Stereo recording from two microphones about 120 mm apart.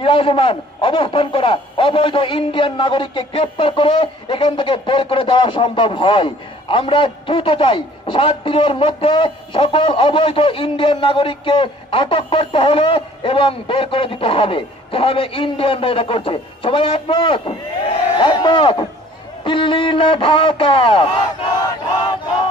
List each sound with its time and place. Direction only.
0.0 s a man's voice: 50° left (ahead or behind)